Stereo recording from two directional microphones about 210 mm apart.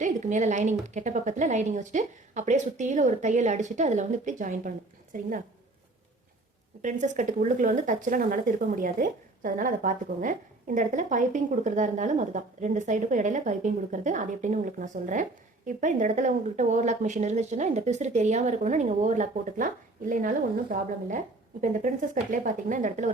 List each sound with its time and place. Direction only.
0.0 s speech: 35° right (ahead or behind)
6.8 s speech: 35° right (ahead or behind)